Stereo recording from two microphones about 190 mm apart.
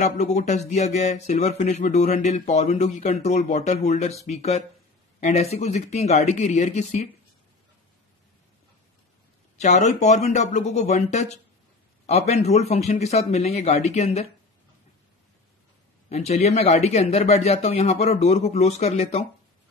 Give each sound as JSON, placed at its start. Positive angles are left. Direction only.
{"t": 0.0, "sound": "speech", "side_deg": 35}
{"t": 9.6, "sound": "speech", "side_deg": 40}
{"t": 16.1, "sound": "speech", "side_deg": 35}